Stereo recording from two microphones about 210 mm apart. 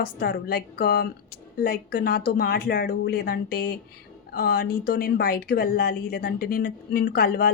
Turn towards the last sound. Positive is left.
turn(degrees=45)  # may be behind; listen again after turning